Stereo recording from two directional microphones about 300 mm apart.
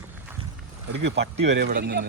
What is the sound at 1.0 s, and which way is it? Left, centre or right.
Speech, right.